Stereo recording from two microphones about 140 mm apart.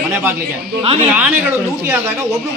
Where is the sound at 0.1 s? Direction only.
15° right (ahead or behind).